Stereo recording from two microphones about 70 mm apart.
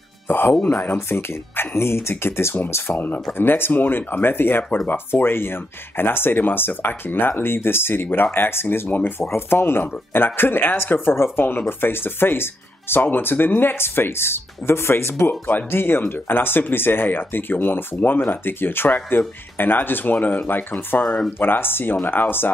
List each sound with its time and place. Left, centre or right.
0.6 s speech: centre
0.9 s speech: left